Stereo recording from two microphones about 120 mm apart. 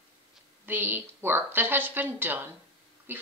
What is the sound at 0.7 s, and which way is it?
A woman's voice, 15° right (ahead or behind).